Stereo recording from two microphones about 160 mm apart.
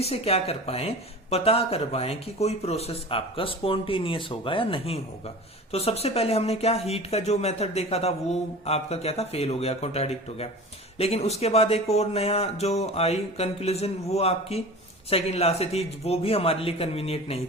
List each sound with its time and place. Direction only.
0.0 s speech: 40° left (ahead or behind)